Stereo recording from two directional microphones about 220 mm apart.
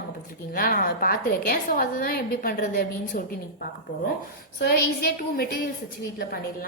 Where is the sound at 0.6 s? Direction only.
40° left (ahead or behind).